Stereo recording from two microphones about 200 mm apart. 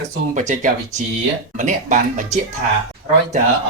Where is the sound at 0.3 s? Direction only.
35° right (ahead or behind).